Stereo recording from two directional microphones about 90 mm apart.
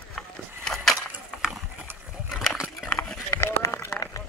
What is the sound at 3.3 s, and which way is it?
Run, 30° left (ahead or behind).